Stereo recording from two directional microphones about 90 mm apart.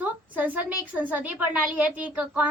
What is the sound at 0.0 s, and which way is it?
A woman's voice, 20° right (ahead or behind).